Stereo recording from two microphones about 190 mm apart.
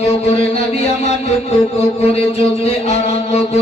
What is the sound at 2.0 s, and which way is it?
Mantra, 30° left (ahead or behind).